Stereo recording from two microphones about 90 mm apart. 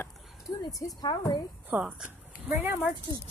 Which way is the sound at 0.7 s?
45° left (ahead or behind).